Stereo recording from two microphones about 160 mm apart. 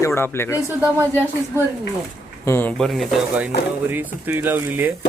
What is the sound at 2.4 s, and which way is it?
Speech, 15° left (ahead or behind).